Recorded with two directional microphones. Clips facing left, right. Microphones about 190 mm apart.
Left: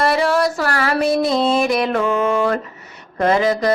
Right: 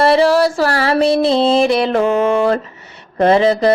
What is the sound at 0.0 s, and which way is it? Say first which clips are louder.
Music: right 5 dB; 30° right (ahead or behind).